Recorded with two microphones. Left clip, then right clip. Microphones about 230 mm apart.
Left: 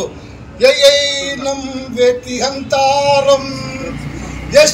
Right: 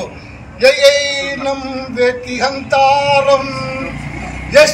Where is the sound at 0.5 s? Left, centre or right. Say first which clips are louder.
Even; left.